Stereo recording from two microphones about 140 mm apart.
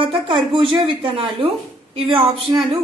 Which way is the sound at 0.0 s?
35° right (ahead or behind).